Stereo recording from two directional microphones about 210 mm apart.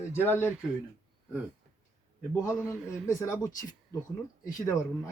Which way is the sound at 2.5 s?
5° right (ahead or behind).